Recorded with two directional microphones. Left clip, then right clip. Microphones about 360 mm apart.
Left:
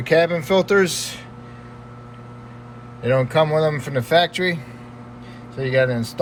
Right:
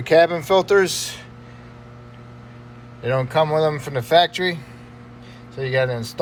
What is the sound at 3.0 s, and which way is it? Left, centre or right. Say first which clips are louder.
A man's voice: left 2 dB; centre.